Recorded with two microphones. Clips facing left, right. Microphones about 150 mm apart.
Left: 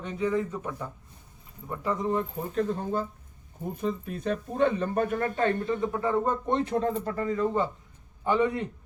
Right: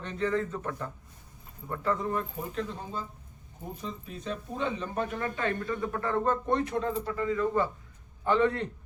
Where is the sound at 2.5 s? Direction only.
50° left (ahead or behind).